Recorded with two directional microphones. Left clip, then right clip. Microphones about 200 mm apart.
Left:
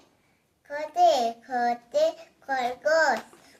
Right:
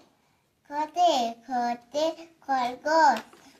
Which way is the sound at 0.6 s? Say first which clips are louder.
Left 2 dB; 20° left (ahead or behind).